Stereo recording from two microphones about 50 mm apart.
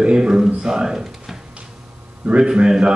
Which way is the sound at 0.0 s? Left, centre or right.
Centre.